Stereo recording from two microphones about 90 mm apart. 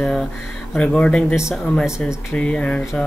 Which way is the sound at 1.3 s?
5° right (ahead or behind).